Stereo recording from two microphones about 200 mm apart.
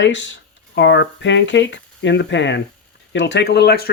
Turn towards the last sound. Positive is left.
turn(degrees=55)  # may be behind; listen again after turning